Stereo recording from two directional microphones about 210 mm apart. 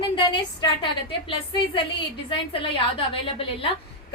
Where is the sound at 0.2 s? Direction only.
20° left (ahead or behind).